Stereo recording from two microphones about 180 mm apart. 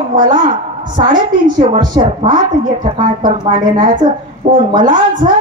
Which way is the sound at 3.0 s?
45° right (ahead or behind).